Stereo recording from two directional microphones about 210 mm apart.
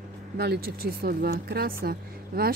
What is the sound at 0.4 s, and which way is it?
Speech, 50° right (ahead or behind).